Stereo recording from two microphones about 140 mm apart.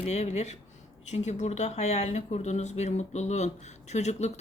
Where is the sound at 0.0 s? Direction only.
50° left (ahead or behind).